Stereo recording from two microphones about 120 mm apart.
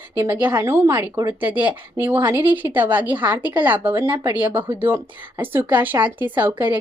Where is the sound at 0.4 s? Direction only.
20° right (ahead or behind).